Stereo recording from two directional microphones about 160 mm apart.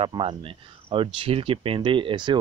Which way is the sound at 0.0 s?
35° right (ahead or behind).